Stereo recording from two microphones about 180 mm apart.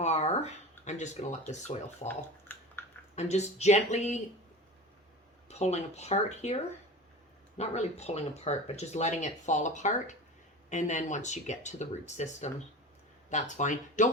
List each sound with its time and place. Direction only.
0.0 s speech: 35° left (ahead or behind)
2.0 s a sound: 10° left (ahead or behind)
3.2 s speech: 40° left (ahead or behind)
5.5 s speech: 35° left (ahead or behind)
7.6 s speech: 35° left (ahead or behind)